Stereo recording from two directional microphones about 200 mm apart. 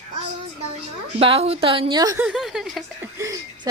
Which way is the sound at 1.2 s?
30° right (ahead or behind).